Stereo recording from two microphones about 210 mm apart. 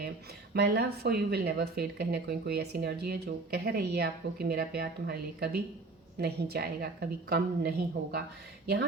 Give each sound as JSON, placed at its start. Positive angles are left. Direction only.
{"t": 0.5, "sound": "speech", "side_deg": -50}